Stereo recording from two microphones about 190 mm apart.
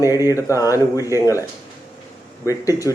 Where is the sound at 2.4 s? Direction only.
15° left (ahead or behind).